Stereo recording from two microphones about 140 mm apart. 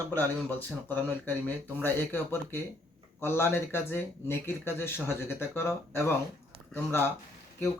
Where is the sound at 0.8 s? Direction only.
15° left (ahead or behind).